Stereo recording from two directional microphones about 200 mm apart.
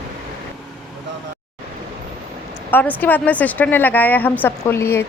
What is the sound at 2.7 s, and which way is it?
Speech, 10° left (ahead or behind).